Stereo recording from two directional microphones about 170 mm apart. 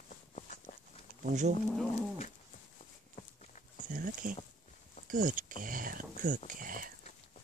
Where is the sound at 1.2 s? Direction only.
45° right (ahead or behind).